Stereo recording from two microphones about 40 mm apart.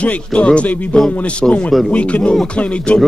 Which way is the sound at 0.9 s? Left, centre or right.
Centre.